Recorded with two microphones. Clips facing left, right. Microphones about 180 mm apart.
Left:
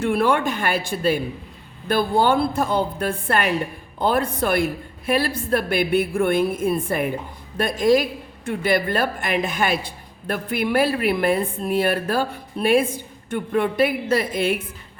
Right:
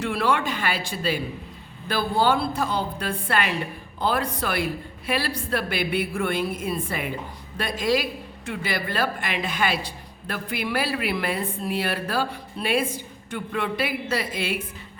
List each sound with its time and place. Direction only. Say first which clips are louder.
0.0 s speech: left 5 dB; 50° left (ahead or behind)